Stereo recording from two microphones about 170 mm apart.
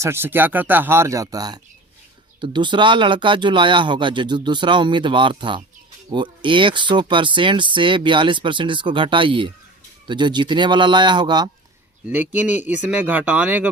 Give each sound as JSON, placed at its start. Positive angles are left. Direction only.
{"t": 0.0, "sound": "speech", "side_deg": -15}
{"t": 12.0, "sound": "speech", "side_deg": -10}